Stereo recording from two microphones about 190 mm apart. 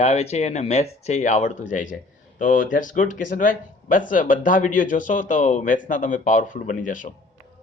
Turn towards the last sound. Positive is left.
turn(degrees=45)  # may be behind; listen again after turning